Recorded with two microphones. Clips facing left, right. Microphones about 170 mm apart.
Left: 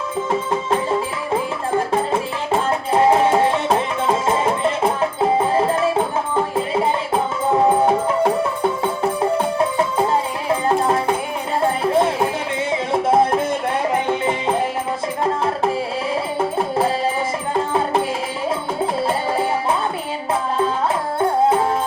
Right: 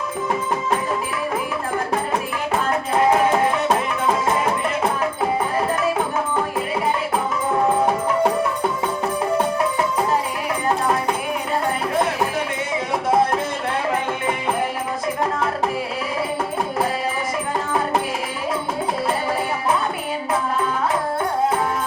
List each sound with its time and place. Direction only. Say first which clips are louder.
2.6 s music: left 2 dB; 25° left (ahead or behind)
10.5 s music: left 4 dB; 25° left (ahead or behind)
19.0 s music: left 2 dB; 25° left (ahead or behind)